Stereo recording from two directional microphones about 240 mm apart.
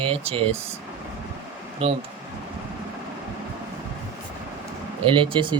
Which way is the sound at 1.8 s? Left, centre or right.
Right.